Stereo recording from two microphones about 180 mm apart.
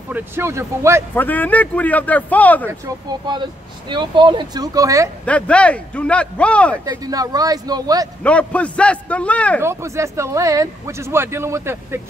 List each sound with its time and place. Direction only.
0.1 s speech: 15° right (ahead or behind)
1.1 s speech: 10° left (ahead or behind)
3.9 s speech: 25° right (ahead or behind)
5.2 s speech: 5° left (ahead or behind)
6.9 s speech: 20° right (ahead or behind)
8.2 s speech: 5° left (ahead or behind)
9.6 s speech: 15° right (ahead or behind)